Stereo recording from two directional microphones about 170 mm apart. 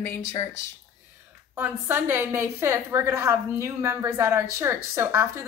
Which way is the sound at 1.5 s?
10° right (ahead or behind).